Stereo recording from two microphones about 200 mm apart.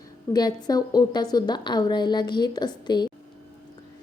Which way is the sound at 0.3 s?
20° left (ahead or behind).